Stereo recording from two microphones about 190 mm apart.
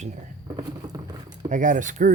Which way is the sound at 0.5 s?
20° right (ahead or behind).